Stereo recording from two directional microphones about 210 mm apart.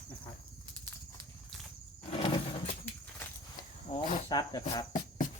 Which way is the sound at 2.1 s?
25° left (ahead or behind).